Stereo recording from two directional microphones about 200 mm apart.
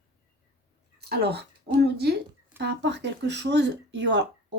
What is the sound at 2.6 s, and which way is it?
Speech, 60° right (ahead or behind).